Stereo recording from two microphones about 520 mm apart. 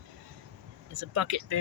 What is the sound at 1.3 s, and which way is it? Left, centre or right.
Speech, right.